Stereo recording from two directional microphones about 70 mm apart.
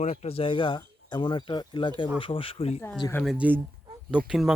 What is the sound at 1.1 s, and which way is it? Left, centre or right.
Speech, left.